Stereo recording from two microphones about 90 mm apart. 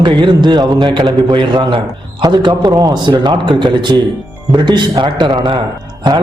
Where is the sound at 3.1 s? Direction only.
60° right (ahead or behind).